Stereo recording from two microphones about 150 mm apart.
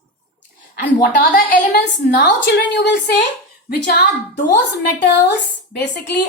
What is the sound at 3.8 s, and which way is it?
Speech, 90° left.